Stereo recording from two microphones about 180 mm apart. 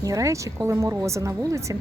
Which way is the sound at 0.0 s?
20° right (ahead or behind).